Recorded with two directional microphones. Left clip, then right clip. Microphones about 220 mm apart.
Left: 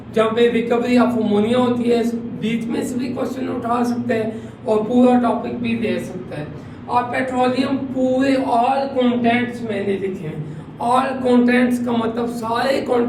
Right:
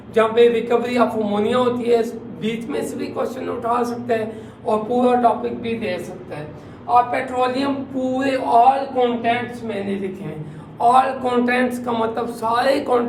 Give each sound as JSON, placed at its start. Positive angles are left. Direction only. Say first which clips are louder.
{"t": 0.1, "sound": "a man's voice", "louder": "right 2 dB", "side_deg": -30}
{"t": 6.9, "sound": "a man's voice", "louder": "right 2 dB", "side_deg": -25}
{"t": 10.8, "sound": "a man's voice", "louder": "right 3 dB", "side_deg": -25}